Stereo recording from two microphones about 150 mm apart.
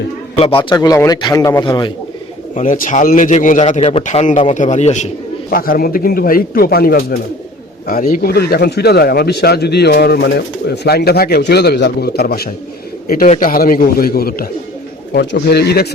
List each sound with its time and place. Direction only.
0.3 s a man's voice: 35° left (ahead or behind)
0.8 s speech: 25° left (ahead or behind)
2.6 s a man's voice: 60° left (ahead or behind)
5.5 s speech: 75° left (ahead or behind)
7.9 s a man's voice: 70° left (ahead or behind); by 15.9 s 90° left